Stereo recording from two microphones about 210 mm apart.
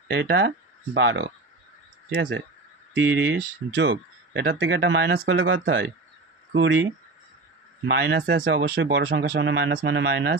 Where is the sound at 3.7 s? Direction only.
60° right (ahead or behind).